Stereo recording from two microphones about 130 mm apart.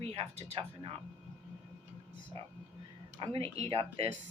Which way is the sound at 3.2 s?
45° right (ahead or behind).